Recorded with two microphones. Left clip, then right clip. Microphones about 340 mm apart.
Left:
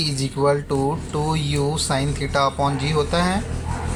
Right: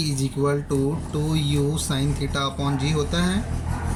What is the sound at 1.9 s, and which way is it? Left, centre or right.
Speech, centre.